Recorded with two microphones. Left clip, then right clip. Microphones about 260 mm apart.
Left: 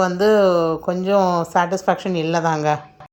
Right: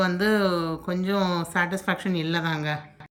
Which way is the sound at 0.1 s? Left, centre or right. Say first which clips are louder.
Left 9 dB; centre.